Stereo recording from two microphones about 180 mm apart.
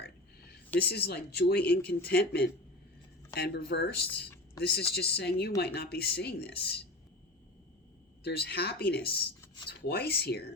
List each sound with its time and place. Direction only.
0.0 s a sound: 60° left (ahead or behind)
0.8 s speech: 60° left (ahead or behind)
8.2 s speech: 65° left (ahead or behind)